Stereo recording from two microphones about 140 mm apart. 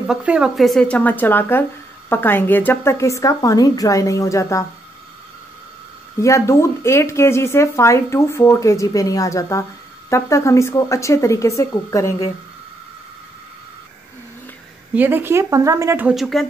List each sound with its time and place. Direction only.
0.0 s speech: 5° right (ahead or behind); by 4.6 s 20° left (ahead or behind)
6.1 s speech: 20° left (ahead or behind)
15.0 s speech: 15° right (ahead or behind)
16.1 s speech: centre (ahead or behind)